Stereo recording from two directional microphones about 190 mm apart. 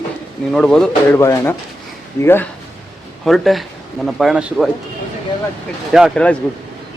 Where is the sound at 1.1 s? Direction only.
15° left (ahead or behind).